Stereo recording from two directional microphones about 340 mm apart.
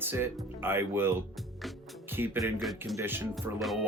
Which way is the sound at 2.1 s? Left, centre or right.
Centre.